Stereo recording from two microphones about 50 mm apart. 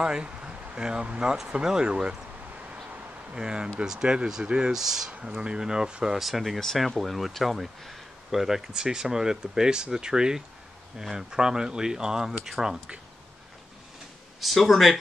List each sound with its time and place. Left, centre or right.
0.0 s speech: centre
3.3 s speech: centre
6.1 s speech: centre
14.4 s speech: centre